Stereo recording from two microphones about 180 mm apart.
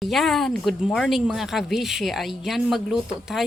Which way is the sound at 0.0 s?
Centre (ahead or behind).